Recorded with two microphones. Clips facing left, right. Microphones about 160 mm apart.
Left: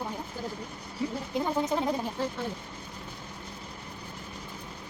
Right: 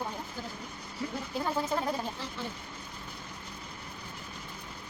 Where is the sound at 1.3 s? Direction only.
20° left (ahead or behind).